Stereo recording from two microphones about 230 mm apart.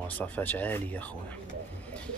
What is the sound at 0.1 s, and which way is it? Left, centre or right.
Speech, centre.